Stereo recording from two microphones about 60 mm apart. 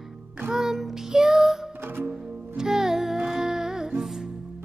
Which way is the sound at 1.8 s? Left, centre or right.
Right.